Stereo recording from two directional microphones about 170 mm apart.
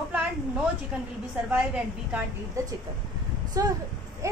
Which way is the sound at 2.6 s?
20° right (ahead or behind).